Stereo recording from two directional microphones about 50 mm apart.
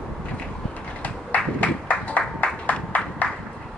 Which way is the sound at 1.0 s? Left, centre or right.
Left.